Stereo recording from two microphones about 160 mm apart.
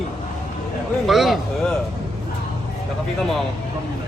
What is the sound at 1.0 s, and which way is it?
Speech, centre (ahead or behind).